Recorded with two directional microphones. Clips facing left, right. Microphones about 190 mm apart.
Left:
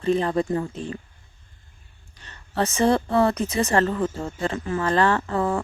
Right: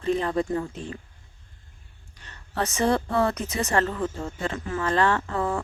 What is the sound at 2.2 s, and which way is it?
Speech, 30° left (ahead or behind).